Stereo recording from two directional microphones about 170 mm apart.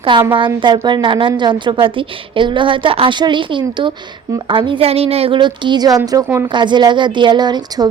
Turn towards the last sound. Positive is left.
turn(degrees=-25)  # may be behind; listen again after turning